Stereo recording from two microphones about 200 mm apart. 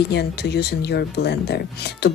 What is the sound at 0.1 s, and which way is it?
Speech, 55° left (ahead or behind).